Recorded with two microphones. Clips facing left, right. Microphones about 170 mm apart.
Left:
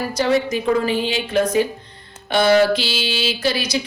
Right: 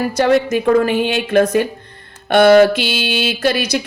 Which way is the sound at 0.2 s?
60° right (ahead or behind).